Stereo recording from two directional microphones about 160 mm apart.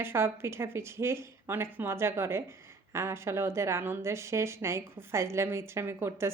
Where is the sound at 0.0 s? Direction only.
15° right (ahead or behind).